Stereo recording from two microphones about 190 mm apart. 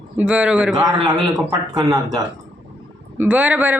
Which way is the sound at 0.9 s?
20° right (ahead or behind).